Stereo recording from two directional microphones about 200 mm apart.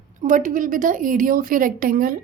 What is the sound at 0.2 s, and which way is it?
A woman's voice, 40° right (ahead or behind).